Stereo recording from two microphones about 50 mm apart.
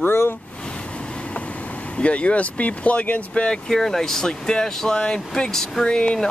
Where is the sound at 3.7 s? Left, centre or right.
Centre.